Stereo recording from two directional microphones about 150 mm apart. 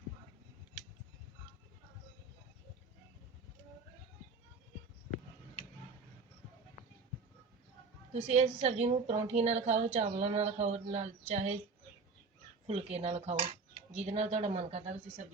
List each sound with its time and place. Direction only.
8.3 s a woman's voice: 45° right (ahead or behind)
12.6 s a woman's voice: 45° right (ahead or behind)